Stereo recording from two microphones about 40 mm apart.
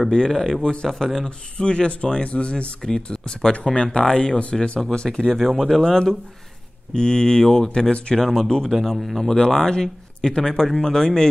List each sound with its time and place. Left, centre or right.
0.3 s speech: centre
0.6 s speech: left
0.8 s speech: centre
1.6 s speech: left
2.8 s speech: centre
4.7 s speech: centre
5.3 s speech: centre
8.9 s speech: centre
9.2 s speech: centre